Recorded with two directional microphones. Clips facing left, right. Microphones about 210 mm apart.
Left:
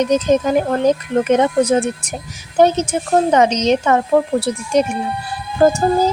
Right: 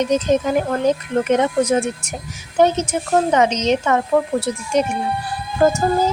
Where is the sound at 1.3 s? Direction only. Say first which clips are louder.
Left 3 dB; 35° left (ahead or behind).